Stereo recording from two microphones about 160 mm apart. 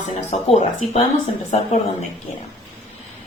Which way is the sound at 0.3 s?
40° left (ahead or behind).